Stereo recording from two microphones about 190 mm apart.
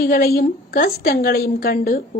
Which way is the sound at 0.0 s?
50° left (ahead or behind).